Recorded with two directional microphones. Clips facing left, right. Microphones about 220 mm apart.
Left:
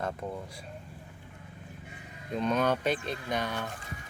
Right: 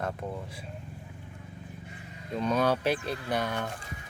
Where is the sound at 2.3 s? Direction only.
5° right (ahead or behind).